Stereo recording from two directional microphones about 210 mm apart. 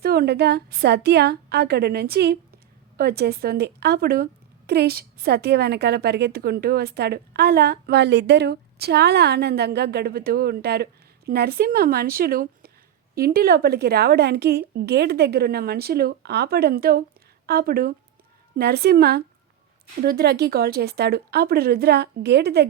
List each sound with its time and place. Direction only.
0.0 s a woman's voice: 50° right (ahead or behind)